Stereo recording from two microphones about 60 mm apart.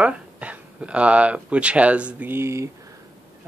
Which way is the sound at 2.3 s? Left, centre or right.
Right.